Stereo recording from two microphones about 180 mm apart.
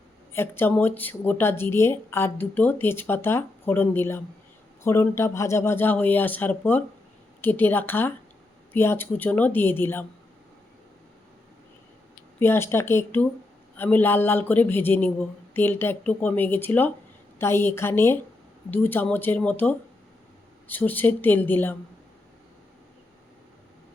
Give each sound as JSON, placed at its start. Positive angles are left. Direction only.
{"t": 0.3, "sound": "a woman's voice", "side_deg": 10}
{"t": 12.4, "sound": "a woman's voice", "side_deg": 15}